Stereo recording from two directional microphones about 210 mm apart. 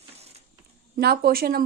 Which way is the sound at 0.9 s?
45° right (ahead or behind).